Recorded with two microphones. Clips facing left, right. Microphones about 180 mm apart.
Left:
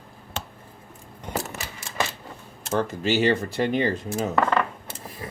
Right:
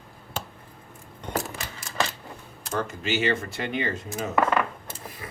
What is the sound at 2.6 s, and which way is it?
Speech, 35° left (ahead or behind).